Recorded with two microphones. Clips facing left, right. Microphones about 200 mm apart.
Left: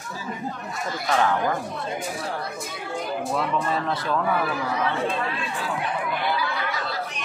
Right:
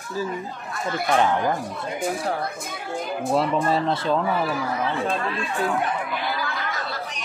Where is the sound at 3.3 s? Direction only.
30° right (ahead or behind).